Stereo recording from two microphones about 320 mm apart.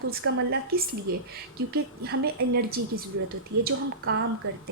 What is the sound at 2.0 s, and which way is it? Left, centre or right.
A woman's voice, right.